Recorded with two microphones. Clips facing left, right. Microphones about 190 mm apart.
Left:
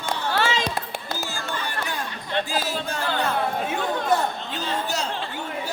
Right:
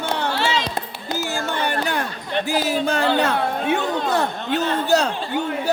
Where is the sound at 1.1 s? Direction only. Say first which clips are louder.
Right 8 dB; 65° right (ahead or behind).